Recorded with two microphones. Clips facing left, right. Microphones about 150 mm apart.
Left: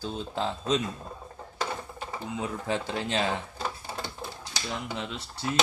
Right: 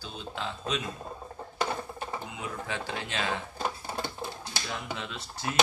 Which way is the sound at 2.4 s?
35° left (ahead or behind).